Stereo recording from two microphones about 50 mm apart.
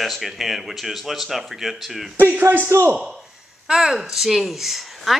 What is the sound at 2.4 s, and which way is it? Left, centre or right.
Speech, right.